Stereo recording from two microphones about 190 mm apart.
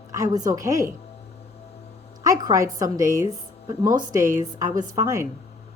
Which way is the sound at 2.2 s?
20° right (ahead or behind).